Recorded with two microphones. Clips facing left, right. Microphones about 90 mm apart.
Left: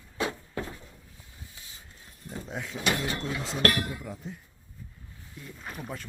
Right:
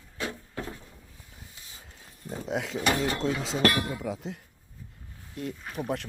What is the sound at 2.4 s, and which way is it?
Speech, 90° right.